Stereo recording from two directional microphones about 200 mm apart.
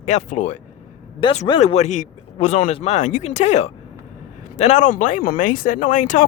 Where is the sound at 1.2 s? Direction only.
25° left (ahead or behind).